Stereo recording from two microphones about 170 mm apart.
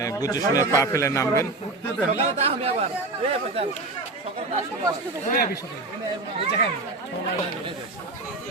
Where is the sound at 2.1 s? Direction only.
35° right (ahead or behind).